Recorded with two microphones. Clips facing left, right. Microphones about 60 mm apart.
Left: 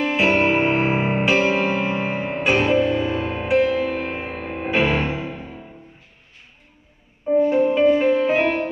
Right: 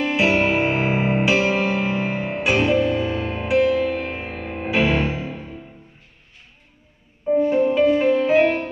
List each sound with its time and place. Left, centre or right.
0.0 s music: centre
4.6 s music: centre
7.2 s music: centre